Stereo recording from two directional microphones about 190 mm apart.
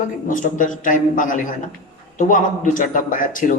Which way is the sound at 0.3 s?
45° left (ahead or behind).